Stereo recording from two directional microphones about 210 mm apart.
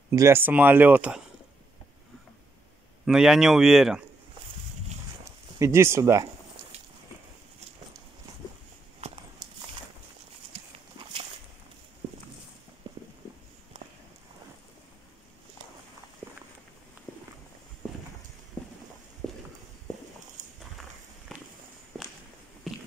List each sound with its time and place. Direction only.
0.1 s speech: 15° right (ahead or behind)
3.1 s speech: centre (ahead or behind)
5.2 s speech: 15° right (ahead or behind)
8.3 s a sound: 15° right (ahead or behind)
9.0 s walk: 30° right (ahead or behind)
13.7 s walk: 30° right (ahead or behind)
19.2 s walk: centre (ahead or behind)
20.4 s walk: 35° right (ahead or behind)
21.3 s walk: centre (ahead or behind)
22.7 s walk: centre (ahead or behind)